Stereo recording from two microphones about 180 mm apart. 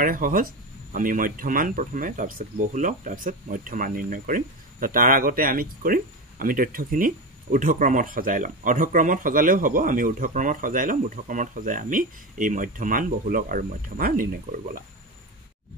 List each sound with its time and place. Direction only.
0.0 s speech: 50° right (ahead or behind)